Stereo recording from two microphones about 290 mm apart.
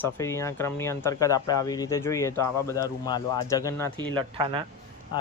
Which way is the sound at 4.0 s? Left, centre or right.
Centre.